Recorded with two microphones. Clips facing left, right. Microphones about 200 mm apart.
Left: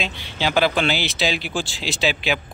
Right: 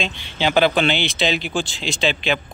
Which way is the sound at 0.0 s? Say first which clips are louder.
Right 2 dB; 5° left (ahead or behind).